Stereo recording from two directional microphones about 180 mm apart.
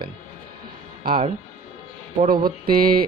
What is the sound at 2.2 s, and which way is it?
Speech, 55° right (ahead or behind).